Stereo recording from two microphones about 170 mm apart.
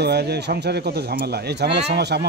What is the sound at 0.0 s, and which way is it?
Speech, 75° right (ahead or behind).